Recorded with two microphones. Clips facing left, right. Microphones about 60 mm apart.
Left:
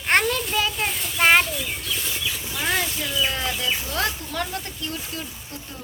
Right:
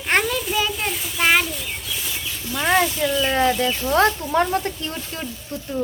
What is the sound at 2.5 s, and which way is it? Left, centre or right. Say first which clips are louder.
Speech: right 7 dB; centre.